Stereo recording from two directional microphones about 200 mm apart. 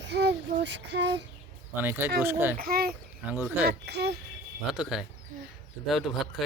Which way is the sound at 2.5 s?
50° right (ahead or behind).